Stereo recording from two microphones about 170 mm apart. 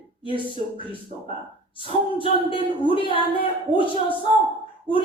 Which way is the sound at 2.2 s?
30° left (ahead or behind).